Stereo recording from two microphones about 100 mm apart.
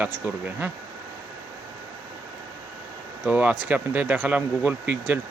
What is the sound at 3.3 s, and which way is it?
Speech, 15° right (ahead or behind).